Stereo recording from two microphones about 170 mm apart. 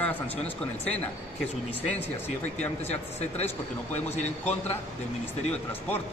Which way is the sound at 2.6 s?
40° left (ahead or behind).